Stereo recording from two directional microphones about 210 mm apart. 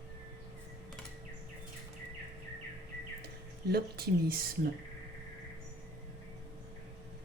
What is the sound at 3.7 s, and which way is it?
Speech, 45° right (ahead or behind).